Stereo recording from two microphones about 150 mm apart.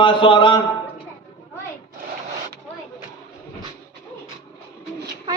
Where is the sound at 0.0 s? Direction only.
35° left (ahead or behind).